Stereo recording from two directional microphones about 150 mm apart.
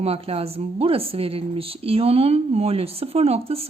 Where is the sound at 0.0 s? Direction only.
40° right (ahead or behind).